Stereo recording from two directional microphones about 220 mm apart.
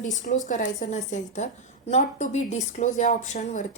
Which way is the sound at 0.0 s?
35° left (ahead or behind).